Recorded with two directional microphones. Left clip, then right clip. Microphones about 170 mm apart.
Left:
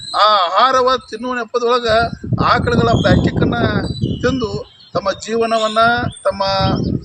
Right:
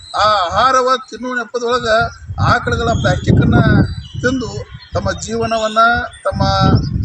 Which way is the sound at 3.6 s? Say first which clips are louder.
Right 3 dB; 35° left (ahead or behind).